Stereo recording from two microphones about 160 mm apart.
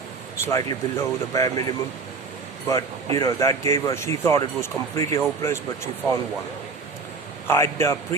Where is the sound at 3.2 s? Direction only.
20° left (ahead or behind).